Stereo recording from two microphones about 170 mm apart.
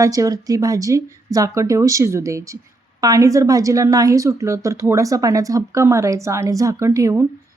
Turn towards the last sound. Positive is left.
turn(degrees=-15)  # may be behind; listen again after turning